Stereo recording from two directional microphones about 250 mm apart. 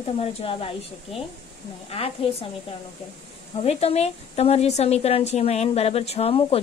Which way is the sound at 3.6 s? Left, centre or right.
Left.